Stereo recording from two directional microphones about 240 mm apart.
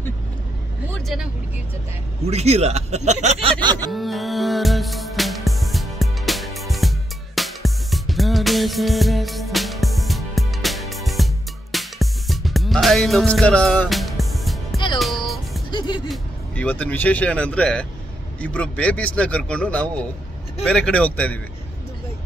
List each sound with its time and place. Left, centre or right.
0.9 s speech: centre
2.2 s speech: right
3.9 s music: centre
16.1 s a man's voice: centre